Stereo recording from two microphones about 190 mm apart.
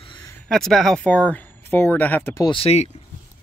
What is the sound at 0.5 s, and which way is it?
Speech, centre (ahead or behind).